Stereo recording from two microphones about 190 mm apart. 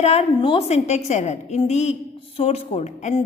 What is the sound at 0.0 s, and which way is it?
A woman's voice, 35° left (ahead or behind).